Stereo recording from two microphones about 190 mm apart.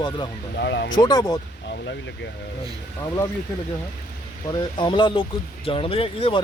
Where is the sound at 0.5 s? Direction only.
65° left (ahead or behind).